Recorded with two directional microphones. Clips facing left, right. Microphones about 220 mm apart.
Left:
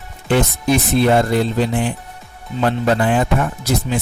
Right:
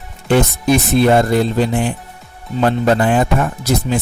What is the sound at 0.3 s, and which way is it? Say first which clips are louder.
Speech: right 3 dB; 45° right (ahead or behind).